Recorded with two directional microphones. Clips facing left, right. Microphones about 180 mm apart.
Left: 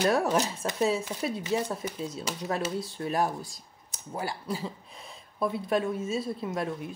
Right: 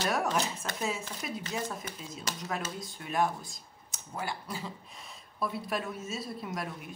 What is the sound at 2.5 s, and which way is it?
A woman's voice, 35° left (ahead or behind).